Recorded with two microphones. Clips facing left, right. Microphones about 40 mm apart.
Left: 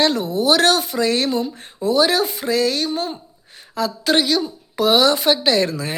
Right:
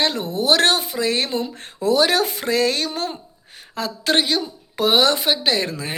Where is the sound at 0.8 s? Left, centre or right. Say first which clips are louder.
Left 3 dB; centre.